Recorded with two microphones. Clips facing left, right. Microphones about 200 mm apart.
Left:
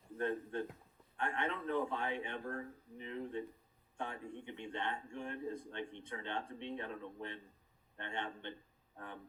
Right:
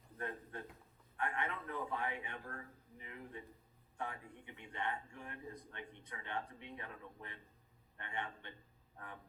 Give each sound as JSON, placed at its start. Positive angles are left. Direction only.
{"t": 0.2, "sound": "speech", "side_deg": 25}